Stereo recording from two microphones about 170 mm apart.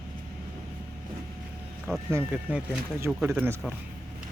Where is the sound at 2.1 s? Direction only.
15° right (ahead or behind).